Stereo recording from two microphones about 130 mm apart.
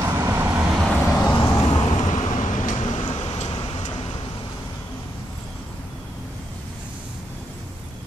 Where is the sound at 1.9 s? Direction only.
65° left (ahead or behind).